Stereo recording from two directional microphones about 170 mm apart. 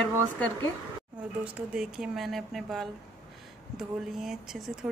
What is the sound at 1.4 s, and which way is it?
A woman's voice, 5° right (ahead or behind).